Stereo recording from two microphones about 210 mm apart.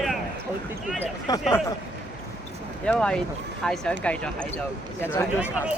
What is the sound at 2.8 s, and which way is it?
Speech, 5° left (ahead or behind).